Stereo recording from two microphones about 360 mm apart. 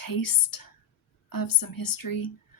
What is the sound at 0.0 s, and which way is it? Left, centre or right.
Speech, left.